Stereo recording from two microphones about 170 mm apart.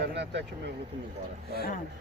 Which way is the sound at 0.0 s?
90° right.